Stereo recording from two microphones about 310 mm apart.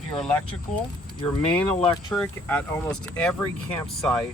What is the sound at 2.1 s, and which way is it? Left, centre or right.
Speech, centre.